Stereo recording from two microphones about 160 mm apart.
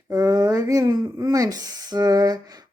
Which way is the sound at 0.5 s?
20° right (ahead or behind).